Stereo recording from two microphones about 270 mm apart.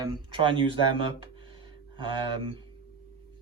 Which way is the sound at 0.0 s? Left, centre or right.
Centre.